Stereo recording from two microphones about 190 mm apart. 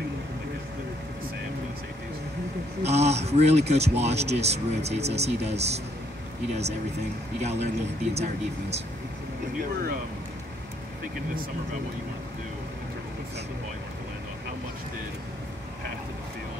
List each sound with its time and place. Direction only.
2.8 s speech: 35° right (ahead or behind)
7.4 s speech: 35° right (ahead or behind)